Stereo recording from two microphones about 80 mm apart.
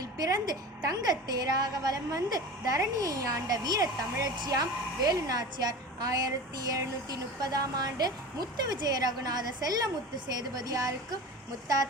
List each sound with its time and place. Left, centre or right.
0.0 s a woman's voice: right